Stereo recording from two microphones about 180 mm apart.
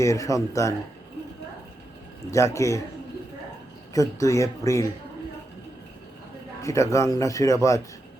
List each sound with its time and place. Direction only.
0.0 s a man's voice: 15° left (ahead or behind)
2.3 s a man's voice: 15° left (ahead or behind)
3.9 s a man's voice: 20° left (ahead or behind)
6.6 s a man's voice: 15° left (ahead or behind)